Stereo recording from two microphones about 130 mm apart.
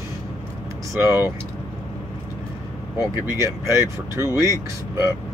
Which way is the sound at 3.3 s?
20° right (ahead or behind).